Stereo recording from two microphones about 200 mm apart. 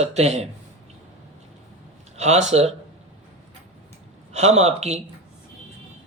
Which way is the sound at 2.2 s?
35° right (ahead or behind).